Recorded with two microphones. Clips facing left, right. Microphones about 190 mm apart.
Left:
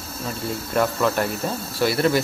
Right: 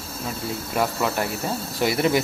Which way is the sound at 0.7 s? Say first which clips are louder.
Left 3 dB; 10° right (ahead or behind).